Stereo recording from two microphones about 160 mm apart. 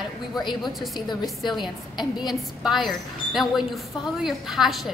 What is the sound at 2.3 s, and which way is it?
A woman's voice, centre (ahead or behind).